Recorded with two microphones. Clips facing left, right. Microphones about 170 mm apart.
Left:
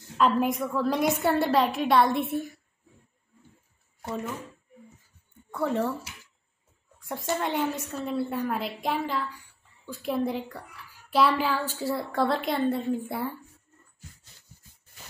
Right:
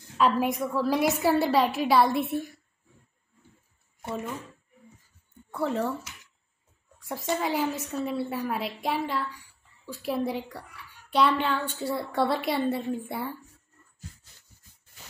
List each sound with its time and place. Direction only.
0.2 s a woman's voice: centre (ahead or behind)
5.5 s speech: centre (ahead or behind)
7.0 s a woman's voice: centre (ahead or behind)